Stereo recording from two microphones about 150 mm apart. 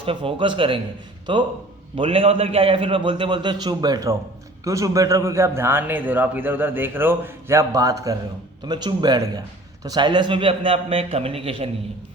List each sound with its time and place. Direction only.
0.0 s a man's voice: 35° right (ahead or behind)